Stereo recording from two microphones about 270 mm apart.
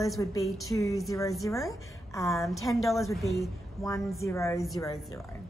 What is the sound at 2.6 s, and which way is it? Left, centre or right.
Speech, centre.